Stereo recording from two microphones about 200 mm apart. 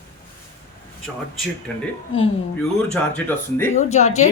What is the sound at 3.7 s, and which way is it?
Speech, 35° left (ahead or behind).